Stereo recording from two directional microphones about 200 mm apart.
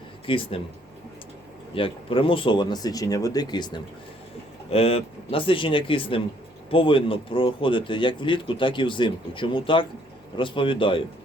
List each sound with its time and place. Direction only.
0.3 s speech: 25° left (ahead or behind)
1.7 s speech: 25° left (ahead or behind)